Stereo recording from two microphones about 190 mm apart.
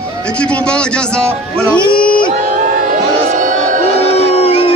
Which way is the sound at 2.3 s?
40° right (ahead or behind).